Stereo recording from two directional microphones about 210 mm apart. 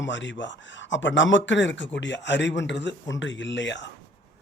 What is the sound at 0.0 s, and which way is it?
Speech, 60° left (ahead or behind).